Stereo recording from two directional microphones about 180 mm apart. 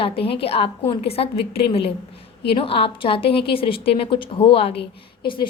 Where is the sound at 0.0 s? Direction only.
30° left (ahead or behind).